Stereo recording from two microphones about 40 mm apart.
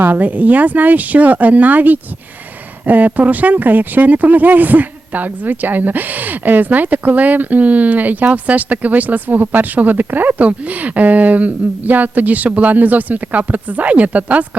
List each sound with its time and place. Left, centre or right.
0.0 s speech: right